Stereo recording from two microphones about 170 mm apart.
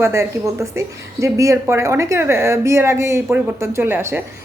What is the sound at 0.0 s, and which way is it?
A woman's voice, 15° right (ahead or behind).